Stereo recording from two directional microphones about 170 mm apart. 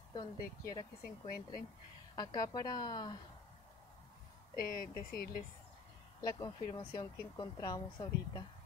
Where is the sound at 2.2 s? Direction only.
25° left (ahead or behind).